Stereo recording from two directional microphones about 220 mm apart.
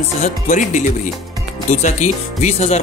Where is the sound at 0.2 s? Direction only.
35° left (ahead or behind).